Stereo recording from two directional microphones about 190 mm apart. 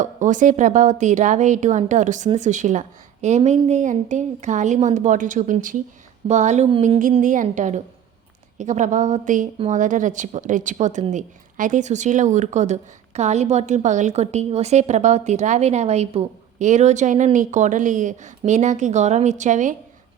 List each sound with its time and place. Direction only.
0.0 s a woman's voice: 40° right (ahead or behind)
7.2 s a woman's voice: 40° right (ahead or behind)